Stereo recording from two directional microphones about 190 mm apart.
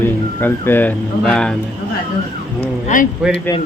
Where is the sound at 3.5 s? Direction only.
15° left (ahead or behind).